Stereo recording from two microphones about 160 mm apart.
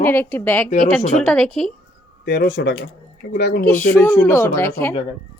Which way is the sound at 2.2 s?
90° left.